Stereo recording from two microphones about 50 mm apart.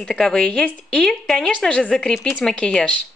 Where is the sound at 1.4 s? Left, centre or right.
Left.